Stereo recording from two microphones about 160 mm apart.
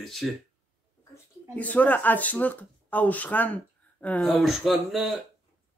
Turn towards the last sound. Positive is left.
turn(degrees=0)  # may be behind; listen again after turning